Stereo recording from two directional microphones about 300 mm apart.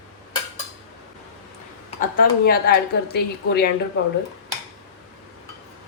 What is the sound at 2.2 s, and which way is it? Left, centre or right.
Speech, left.